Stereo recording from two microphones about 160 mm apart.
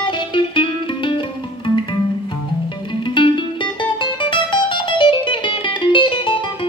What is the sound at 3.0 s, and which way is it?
Music, 30° left (ahead or behind).